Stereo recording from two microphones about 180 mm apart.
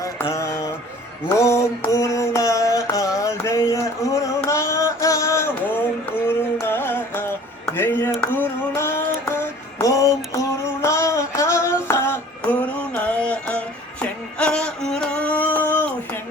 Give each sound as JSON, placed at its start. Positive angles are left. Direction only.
{"t": 0.0, "sound": "mantra", "side_deg": 15}
{"t": 1.3, "sound": "music", "side_deg": 15}
{"t": 14.0, "sound": "a sound", "side_deg": 5}